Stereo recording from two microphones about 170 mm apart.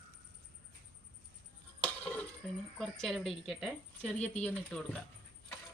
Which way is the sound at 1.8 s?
10° left (ahead or behind).